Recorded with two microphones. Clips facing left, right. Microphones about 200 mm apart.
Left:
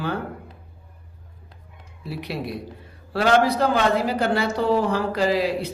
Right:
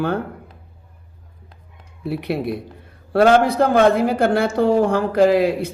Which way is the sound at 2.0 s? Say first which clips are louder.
Right 7 dB; 55° right (ahead or behind).